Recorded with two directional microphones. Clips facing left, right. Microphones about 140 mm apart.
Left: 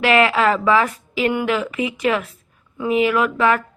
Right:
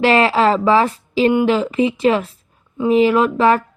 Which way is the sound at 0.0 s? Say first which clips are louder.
Right 2 dB; 30° right (ahead or behind).